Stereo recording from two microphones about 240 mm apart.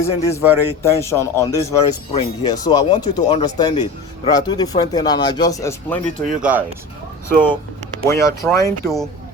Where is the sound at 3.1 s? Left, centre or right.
Centre.